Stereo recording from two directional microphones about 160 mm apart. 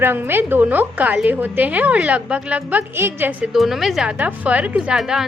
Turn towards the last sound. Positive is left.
turn(degrees=-5)  # may be behind; listen again after turning